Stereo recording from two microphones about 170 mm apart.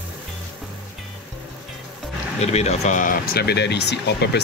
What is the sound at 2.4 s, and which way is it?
Speech, 40° left (ahead or behind).